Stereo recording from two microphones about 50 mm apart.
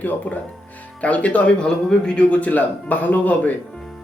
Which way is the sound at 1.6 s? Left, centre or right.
Centre.